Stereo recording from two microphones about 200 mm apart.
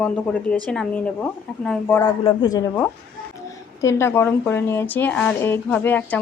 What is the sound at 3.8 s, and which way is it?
Speech, 15° left (ahead or behind).